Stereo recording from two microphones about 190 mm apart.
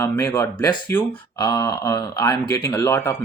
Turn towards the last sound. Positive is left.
turn(degrees=15)  # may be behind; listen again after turning